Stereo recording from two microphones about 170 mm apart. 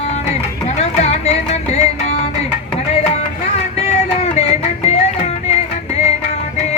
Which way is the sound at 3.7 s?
40° left (ahead or behind).